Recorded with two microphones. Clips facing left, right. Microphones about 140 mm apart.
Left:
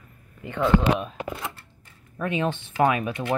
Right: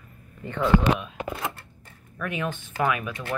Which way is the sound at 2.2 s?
25° left (ahead or behind).